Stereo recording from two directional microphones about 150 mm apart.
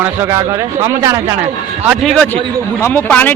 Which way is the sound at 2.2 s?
10° left (ahead or behind).